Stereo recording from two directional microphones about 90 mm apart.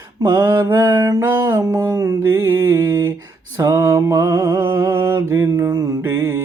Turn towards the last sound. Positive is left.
turn(degrees=-30)  # may be behind; listen again after turning